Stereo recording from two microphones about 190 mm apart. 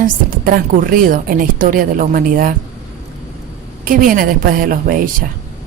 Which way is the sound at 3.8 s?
45° right (ahead or behind).